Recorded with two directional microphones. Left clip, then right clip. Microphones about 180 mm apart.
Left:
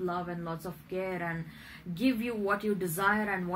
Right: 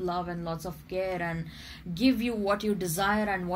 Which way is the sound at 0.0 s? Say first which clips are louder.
Right 3 dB; 30° right (ahead or behind).